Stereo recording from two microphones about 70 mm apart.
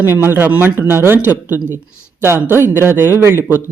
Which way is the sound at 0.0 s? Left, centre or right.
Right.